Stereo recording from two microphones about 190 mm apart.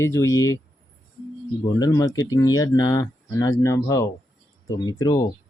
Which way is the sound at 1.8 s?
20° left (ahead or behind).